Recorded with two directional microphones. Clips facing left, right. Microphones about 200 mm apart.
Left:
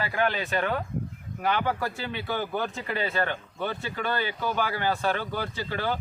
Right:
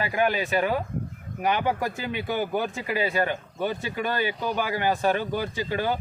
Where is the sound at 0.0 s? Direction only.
15° right (ahead or behind).